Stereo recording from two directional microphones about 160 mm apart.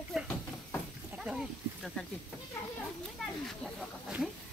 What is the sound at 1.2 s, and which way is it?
Snake, 5° right (ahead or behind).